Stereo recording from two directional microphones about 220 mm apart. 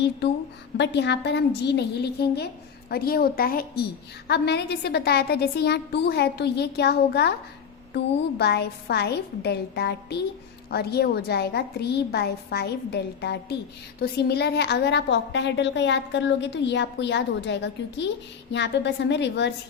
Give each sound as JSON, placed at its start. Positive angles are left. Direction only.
{"t": 0.8, "sound": "a woman's voice", "side_deg": 50}